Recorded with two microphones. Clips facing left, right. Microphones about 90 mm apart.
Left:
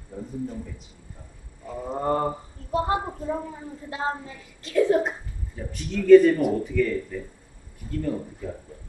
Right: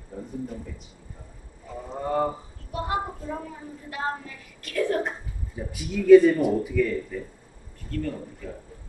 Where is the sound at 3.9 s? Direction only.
25° left (ahead or behind).